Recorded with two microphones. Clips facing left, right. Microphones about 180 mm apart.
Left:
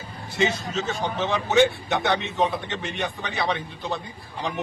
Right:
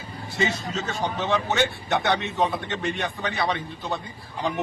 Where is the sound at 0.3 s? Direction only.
Centre (ahead or behind).